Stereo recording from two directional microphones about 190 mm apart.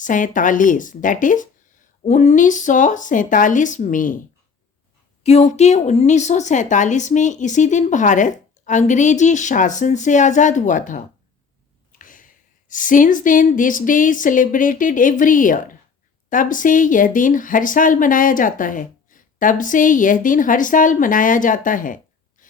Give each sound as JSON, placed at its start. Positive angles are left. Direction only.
{"t": 0.0, "sound": "speech", "side_deg": 45}
{"t": 5.2, "sound": "a woman's voice", "side_deg": 35}